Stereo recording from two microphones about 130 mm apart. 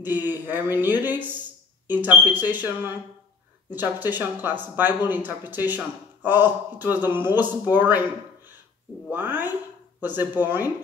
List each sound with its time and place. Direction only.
0.0 s speech: 15° right (ahead or behind)
9.1 s speech: 15° right (ahead or behind)